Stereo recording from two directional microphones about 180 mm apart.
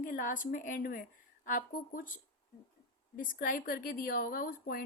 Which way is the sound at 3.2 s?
50° left (ahead or behind).